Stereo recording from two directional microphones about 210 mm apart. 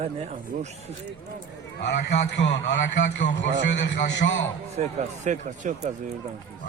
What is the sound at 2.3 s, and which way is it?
A man's voice, 55° left (ahead or behind).